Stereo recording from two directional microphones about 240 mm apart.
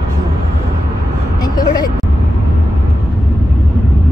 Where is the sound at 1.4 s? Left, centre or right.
Centre.